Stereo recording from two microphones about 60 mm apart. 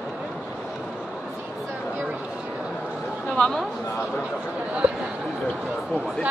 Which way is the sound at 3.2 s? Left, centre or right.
Centre.